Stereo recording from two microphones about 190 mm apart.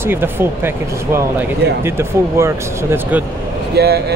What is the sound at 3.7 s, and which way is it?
Speech, 55° right (ahead or behind).